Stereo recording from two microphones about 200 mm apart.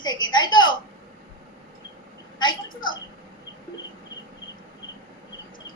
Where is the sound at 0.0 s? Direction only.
20° left (ahead or behind).